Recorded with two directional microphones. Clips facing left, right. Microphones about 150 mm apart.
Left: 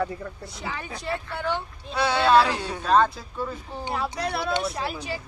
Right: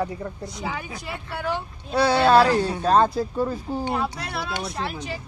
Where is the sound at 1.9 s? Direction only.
35° right (ahead or behind).